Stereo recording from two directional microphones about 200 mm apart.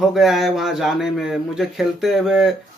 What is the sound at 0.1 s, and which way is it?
A man's voice, centre (ahead or behind).